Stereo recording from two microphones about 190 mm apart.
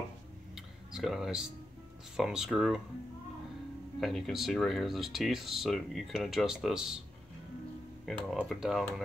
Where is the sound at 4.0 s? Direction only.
Centre (ahead or behind).